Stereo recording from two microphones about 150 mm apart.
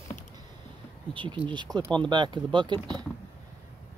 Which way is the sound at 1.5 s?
30° right (ahead or behind).